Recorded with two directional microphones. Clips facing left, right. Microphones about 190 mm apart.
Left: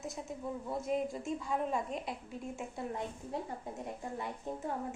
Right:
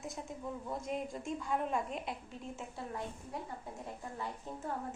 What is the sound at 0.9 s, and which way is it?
A woman's voice, centre (ahead or behind).